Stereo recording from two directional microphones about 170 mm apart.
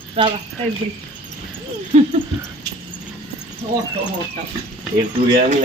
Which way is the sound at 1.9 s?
45° right (ahead or behind).